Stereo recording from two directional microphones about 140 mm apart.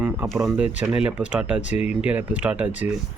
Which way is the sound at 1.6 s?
50° left (ahead or behind).